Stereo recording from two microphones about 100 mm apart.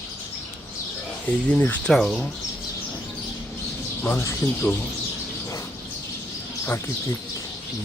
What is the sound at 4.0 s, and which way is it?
Speech, 20° left (ahead or behind).